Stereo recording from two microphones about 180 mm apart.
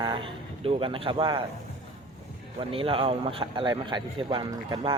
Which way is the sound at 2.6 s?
30° right (ahead or behind).